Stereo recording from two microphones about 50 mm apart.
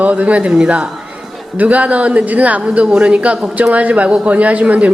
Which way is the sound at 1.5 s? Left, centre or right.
Right.